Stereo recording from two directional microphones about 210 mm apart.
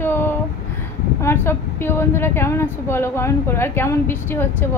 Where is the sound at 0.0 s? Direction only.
10° left (ahead or behind).